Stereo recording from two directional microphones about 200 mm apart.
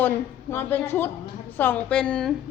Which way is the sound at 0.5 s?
10° left (ahead or behind).